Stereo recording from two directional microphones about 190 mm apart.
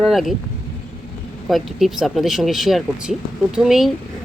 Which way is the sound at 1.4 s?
Centre (ahead or behind).